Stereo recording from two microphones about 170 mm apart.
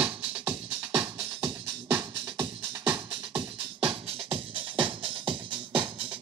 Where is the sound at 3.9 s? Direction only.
35° right (ahead or behind).